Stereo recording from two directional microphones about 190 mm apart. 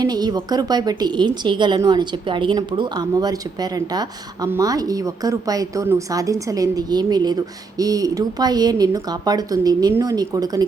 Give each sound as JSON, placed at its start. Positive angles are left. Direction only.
{"t": 0.0, "sound": "a woman's voice", "side_deg": -20}